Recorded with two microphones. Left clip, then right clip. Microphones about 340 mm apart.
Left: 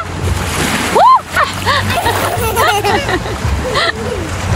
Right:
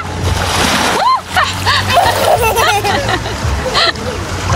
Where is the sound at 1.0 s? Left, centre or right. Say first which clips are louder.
Left 3 dB; centre.